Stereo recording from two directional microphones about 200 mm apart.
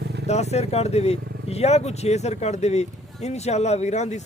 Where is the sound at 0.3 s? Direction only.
35° left (ahead or behind).